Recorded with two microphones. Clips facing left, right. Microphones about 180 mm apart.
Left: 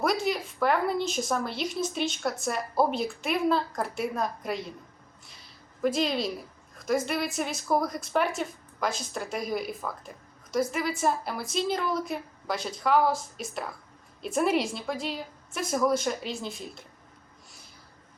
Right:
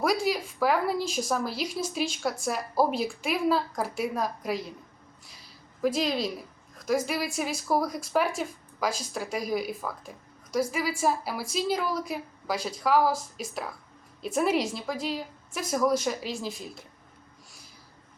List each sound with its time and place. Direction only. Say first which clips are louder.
0.0 s a woman's voice: right 1 dB; centre (ahead or behind)
5.8 s a woman's voice: even; centre (ahead or behind)